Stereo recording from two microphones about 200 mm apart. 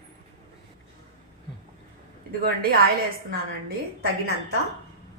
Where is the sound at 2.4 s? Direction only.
50° right (ahead or behind).